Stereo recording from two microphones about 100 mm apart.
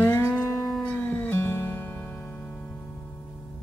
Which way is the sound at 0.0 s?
30° left (ahead or behind).